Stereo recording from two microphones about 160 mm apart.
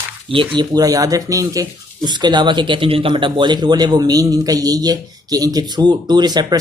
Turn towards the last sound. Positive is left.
turn(degrees=-25)  # may be behind; listen again after turning